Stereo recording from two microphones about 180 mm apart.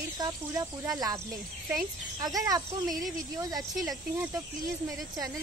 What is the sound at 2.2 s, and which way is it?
Speech, 20° right (ahead or behind).